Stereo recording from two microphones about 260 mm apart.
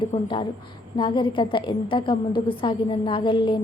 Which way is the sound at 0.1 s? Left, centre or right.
Centre.